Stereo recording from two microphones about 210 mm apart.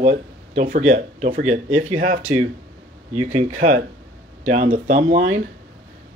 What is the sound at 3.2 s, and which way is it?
Speech, 35° right (ahead or behind).